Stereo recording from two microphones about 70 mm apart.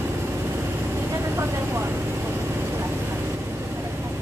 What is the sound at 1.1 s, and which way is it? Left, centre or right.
Vehicle, right.